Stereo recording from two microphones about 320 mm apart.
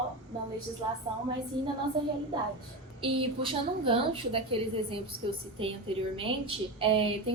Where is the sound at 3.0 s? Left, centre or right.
Centre.